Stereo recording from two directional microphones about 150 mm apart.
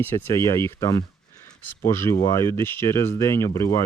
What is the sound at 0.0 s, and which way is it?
Speech, 15° left (ahead or behind).